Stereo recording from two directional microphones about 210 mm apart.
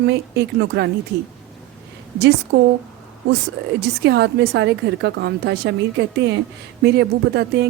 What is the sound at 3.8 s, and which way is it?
A woman's voice, 50° right (ahead or behind).